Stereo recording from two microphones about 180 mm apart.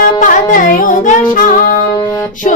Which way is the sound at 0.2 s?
45° left (ahead or behind).